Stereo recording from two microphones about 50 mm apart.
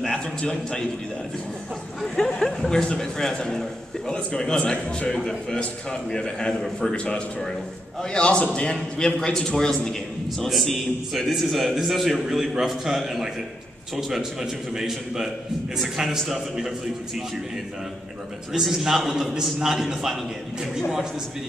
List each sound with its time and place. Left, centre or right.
0.0 s a man's voice: centre
2.1 s a man's voice: centre
4.6 s speech: left
5.0 s a man's voice: centre
10.4 s a man's voice: centre
18.6 s a man's voice: centre